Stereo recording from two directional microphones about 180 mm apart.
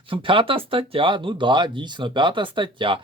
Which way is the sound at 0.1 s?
30° right (ahead or behind).